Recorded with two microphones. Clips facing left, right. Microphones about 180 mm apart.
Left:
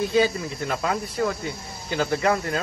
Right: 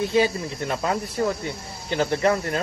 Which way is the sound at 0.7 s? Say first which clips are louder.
Right 1 dB; 30° right (ahead or behind).